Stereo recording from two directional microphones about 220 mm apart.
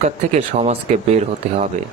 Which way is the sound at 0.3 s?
30° right (ahead or behind).